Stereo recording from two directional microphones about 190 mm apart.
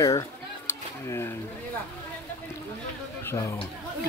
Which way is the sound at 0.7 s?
15° left (ahead or behind).